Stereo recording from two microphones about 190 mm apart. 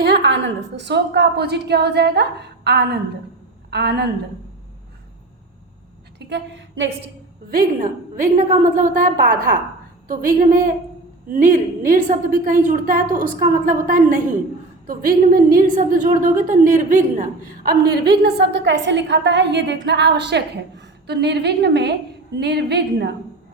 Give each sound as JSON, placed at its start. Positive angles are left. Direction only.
{"t": 0.0, "sound": "a woman's voice", "side_deg": -65}
{"t": 6.1, "sound": "a woman's voice", "side_deg": -65}
{"t": 7.5, "sound": "a woman's voice", "side_deg": -45}
{"t": 17.9, "sound": "a woman's voice", "side_deg": -60}